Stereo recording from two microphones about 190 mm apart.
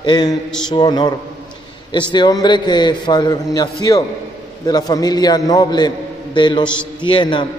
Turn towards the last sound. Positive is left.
turn(degrees=25)  # may be behind; listen again after turning